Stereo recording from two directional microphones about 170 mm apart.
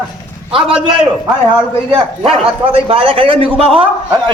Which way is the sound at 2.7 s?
35° right (ahead or behind).